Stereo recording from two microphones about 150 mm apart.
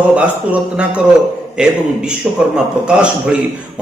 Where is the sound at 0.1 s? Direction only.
10° right (ahead or behind).